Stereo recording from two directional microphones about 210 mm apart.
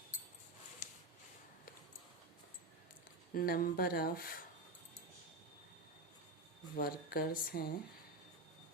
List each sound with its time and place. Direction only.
0.8 s a sound: 35° left (ahead or behind)
3.3 s speech: 45° left (ahead or behind)
6.7 s speech: 45° left (ahead or behind)